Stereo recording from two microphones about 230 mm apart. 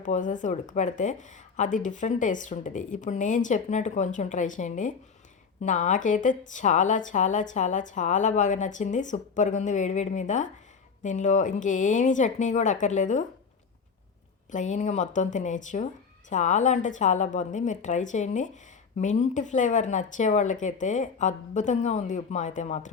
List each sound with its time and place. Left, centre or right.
0.0 s speech: left
14.5 s speech: left